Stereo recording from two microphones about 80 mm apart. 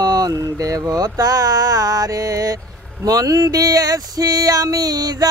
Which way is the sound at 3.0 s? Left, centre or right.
Right.